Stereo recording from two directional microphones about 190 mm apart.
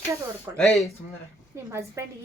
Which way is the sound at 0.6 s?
Centre (ahead or behind).